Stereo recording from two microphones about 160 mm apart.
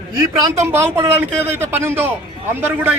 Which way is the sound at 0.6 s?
15° right (ahead or behind).